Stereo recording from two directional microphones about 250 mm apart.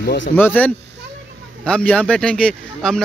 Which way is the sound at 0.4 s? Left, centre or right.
Centre.